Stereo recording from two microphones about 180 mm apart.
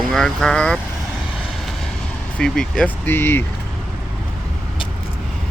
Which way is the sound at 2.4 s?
5° left (ahead or behind).